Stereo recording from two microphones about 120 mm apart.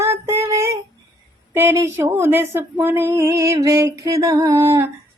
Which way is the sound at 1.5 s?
20° right (ahead or behind).